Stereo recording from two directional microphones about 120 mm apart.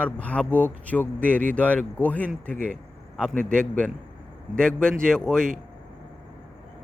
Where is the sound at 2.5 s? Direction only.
90° right.